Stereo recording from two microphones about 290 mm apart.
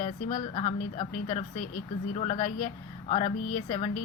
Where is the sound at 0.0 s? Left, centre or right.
Left.